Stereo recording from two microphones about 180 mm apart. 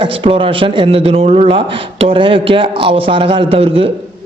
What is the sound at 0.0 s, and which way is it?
A man's voice, 30° right (ahead or behind).